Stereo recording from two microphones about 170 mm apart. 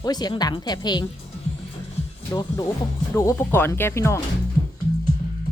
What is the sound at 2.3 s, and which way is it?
Speech, 20° left (ahead or behind).